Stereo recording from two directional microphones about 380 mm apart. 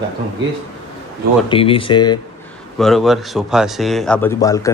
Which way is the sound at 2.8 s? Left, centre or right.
Centre.